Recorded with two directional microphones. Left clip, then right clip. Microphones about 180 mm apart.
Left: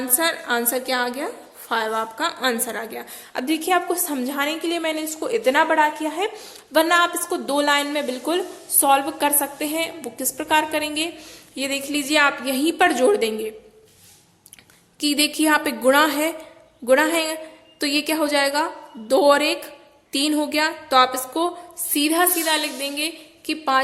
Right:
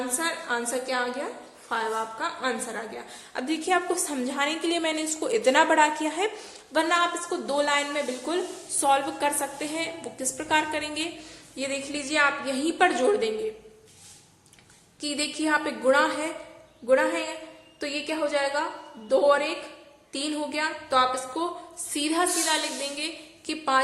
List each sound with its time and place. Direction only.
0.2 s a woman's voice: 35° left (ahead or behind); by 6.4 s 20° left (ahead or behind)
6.7 s a woman's voice: 30° left (ahead or behind)
15.0 s a woman's voice: 35° left (ahead or behind)